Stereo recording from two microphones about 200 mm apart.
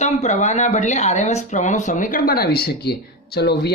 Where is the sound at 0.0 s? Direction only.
35° left (ahead or behind).